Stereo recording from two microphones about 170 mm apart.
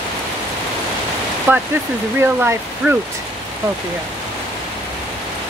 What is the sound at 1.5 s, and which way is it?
Speech, 10° right (ahead or behind).